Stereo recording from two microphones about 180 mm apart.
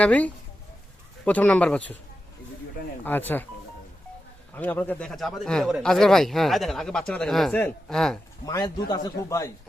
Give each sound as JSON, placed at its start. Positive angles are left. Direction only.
{"t": 0.0, "sound": "speech", "side_deg": 10}
{"t": 3.0, "sound": "speech", "side_deg": 10}
{"t": 4.5, "sound": "a man's voice", "side_deg": 10}
{"t": 8.4, "sound": "a man's voice", "side_deg": 20}